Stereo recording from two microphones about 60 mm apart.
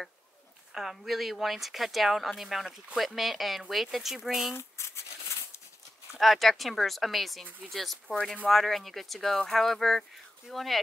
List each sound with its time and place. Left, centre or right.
0.7 s speech: centre
4.6 s a sound: left
6.1 s speech: centre